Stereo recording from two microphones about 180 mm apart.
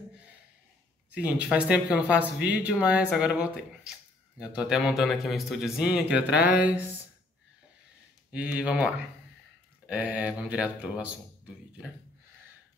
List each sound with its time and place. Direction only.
1.1 s speech: 5° right (ahead or behind)
8.3 s speech: 5° right (ahead or behind)